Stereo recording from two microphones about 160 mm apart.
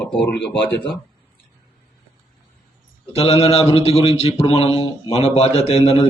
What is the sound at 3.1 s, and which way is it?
A man's voice, 40° left (ahead or behind).